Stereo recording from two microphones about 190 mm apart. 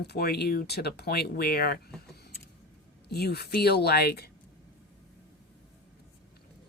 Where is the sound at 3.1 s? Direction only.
60° left (ahead or behind).